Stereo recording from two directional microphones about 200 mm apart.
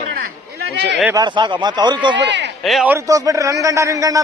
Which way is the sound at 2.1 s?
60° right (ahead or behind).